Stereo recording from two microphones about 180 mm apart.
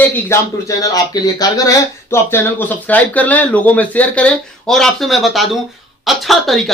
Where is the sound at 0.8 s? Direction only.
20° left (ahead or behind).